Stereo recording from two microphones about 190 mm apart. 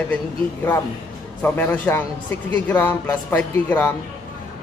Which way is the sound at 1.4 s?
10° left (ahead or behind).